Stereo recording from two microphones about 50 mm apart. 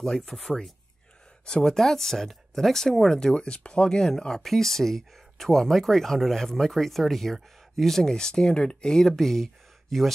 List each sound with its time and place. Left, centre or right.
0.0 s speech: centre